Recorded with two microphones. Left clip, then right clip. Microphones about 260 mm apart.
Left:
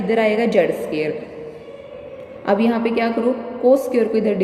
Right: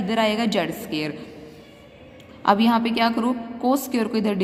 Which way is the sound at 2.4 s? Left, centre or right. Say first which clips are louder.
Left 1 dB; centre.